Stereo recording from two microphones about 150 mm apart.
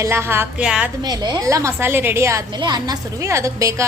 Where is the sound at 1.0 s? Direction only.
25° right (ahead or behind).